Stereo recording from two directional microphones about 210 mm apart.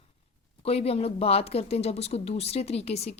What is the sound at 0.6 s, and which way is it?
Speech, 30° left (ahead or behind).